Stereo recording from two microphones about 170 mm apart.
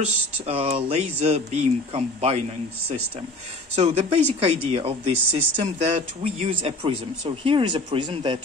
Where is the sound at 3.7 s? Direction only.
40° right (ahead or behind).